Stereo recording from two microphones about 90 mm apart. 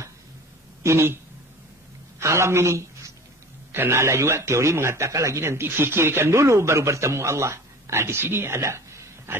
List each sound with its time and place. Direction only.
0.8 s a woman's voice: 25° right (ahead or behind)